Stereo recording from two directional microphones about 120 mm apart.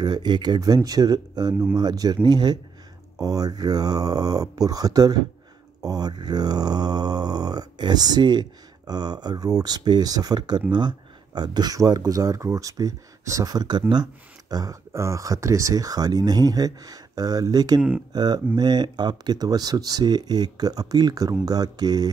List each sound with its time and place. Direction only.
0.0 s speech: 35° right (ahead or behind)
14.5 s speech: 30° right (ahead or behind)